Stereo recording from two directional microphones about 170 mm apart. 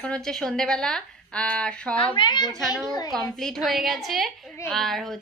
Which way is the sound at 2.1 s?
25° left (ahead or behind).